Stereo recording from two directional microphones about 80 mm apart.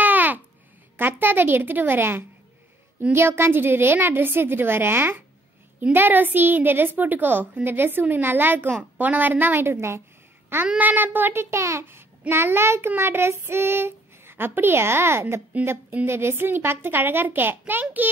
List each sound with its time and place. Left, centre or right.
0.0 s babbling: right
0.9 s a woman's voice: right
10.8 s a child's voice: right